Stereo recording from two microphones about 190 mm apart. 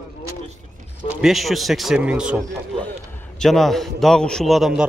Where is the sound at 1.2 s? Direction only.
Centre (ahead or behind).